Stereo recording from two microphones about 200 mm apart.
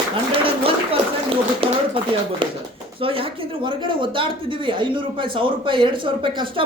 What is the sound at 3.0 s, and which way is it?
Speech, 25° right (ahead or behind).